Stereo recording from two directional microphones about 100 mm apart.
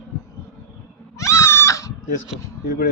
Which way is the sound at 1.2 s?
30° left (ahead or behind).